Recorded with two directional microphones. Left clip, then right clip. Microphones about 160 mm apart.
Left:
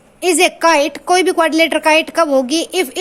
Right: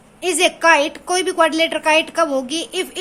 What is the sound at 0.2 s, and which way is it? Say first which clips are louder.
A woman's voice: left 4 dB; 30° left (ahead or behind).